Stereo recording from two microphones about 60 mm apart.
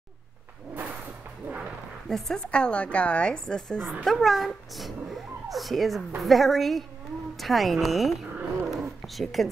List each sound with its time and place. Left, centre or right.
2.0 s a woman's voice: centre